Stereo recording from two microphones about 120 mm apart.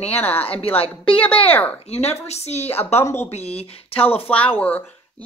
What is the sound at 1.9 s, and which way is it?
Speech, 65° left (ahead or behind).